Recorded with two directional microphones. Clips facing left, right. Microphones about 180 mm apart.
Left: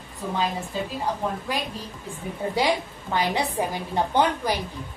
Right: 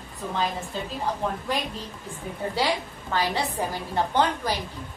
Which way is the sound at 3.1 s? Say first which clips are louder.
Left 2 dB; 15° left (ahead or behind).